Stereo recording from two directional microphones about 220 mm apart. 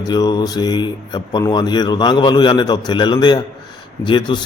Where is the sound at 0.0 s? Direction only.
20° left (ahead or behind).